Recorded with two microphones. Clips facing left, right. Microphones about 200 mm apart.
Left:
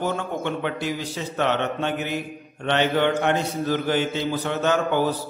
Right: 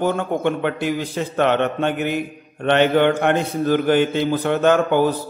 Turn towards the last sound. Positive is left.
turn(degrees=-55)  # may be behind; listen again after turning